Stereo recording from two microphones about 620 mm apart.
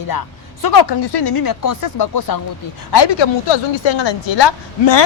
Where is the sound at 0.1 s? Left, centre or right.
Left.